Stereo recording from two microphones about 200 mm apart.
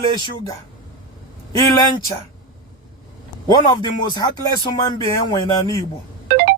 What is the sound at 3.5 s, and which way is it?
Speech, 20° left (ahead or behind).